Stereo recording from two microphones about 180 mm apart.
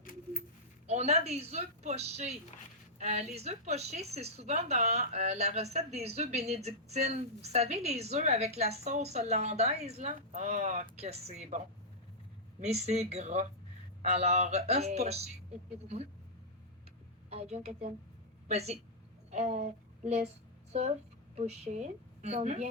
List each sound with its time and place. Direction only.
0.0 s coin: 50° left (ahead or behind)
0.9 s a woman's voice: 35° right (ahead or behind)
17.2 s a woman's voice: 35° right (ahead or behind)
21.3 s a woman's voice: 35° right (ahead or behind)